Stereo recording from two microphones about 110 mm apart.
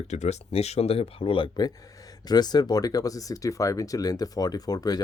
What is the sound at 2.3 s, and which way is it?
Speech, 40° left (ahead or behind).